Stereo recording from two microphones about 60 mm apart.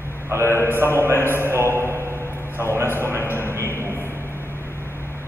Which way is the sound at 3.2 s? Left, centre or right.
Left.